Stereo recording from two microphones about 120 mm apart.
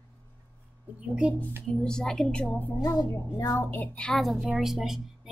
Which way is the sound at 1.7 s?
5° left (ahead or behind).